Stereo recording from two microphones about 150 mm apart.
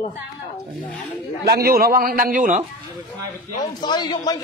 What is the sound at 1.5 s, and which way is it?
A man's voice, 90° right.